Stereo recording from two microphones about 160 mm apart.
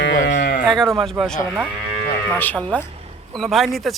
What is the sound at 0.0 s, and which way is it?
Sheep, 90° left.